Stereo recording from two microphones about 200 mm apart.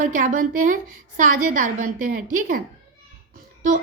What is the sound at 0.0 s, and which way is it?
Speech, 40° right (ahead or behind).